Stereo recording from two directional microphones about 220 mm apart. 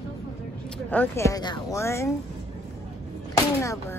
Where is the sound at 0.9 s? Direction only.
10° left (ahead or behind).